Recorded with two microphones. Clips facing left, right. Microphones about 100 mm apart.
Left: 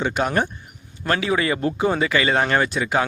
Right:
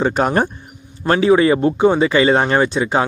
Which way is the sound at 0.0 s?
35° right (ahead or behind).